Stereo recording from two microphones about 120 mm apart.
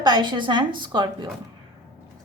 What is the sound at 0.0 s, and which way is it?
A woman's voice, 35° right (ahead or behind).